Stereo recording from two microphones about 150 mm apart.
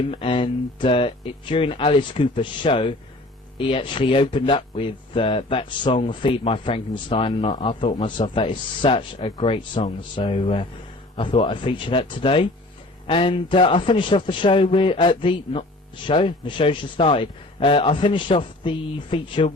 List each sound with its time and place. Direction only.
0.0 s speech: 35° left (ahead or behind)